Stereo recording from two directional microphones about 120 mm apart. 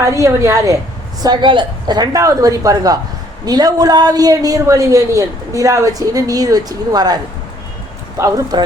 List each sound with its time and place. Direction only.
0.0 s a woman's voice: 25° right (ahead or behind)
1.2 s a man's voice: 40° right (ahead or behind)
8.2 s a man's voice: 35° right (ahead or behind)